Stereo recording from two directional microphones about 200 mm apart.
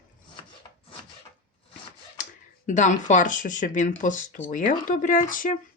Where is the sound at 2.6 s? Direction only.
40° left (ahead or behind).